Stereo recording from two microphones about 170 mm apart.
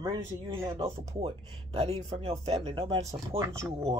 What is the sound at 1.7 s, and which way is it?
Speech, 35° right (ahead or behind).